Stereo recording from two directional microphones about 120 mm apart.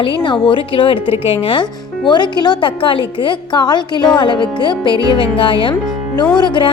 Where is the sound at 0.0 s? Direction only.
45° left (ahead or behind).